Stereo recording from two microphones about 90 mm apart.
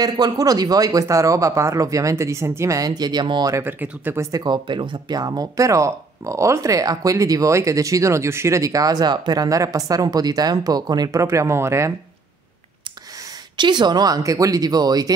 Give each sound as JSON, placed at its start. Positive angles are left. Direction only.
{"t": 0.0, "sound": "speech", "side_deg": -45}
{"t": 3.8, "sound": "speech", "side_deg": -25}
{"t": 4.3, "sound": "speech", "side_deg": -50}
{"t": 13.6, "sound": "speech", "side_deg": -55}